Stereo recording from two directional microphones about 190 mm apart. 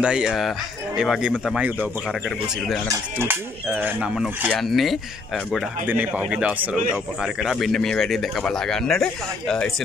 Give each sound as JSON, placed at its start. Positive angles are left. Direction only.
{"t": 0.0, "sound": "speech", "side_deg": -5}
{"t": 3.2, "sound": "speech", "side_deg": -10}